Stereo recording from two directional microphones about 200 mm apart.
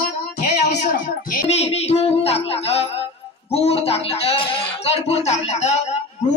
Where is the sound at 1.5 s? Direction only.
30° left (ahead or behind).